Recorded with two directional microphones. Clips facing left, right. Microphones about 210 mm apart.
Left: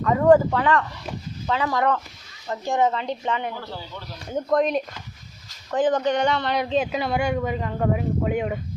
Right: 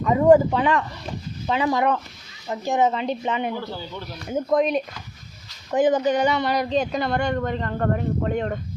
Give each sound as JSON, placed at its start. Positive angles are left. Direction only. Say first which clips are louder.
{"t": 0.0, "sound": "speech", "louder": "right 1 dB", "side_deg": -15}
{"t": 4.3, "sound": "speech", "louder": "right 1 dB", "side_deg": -5}
{"t": 6.6, "sound": "speech", "louder": "right 1 dB", "side_deg": 5}